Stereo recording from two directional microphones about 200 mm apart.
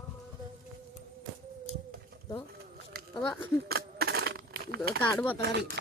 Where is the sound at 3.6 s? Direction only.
55° right (ahead or behind).